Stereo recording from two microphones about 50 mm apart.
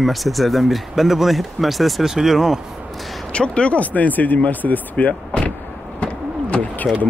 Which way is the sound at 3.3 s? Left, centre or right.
Left.